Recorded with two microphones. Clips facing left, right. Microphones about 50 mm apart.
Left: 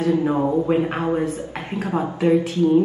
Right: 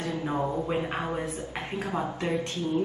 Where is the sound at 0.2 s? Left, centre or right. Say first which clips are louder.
Left 9 dB; centre.